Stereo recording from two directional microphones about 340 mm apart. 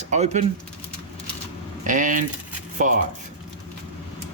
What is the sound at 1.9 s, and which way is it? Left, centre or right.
Speech, right.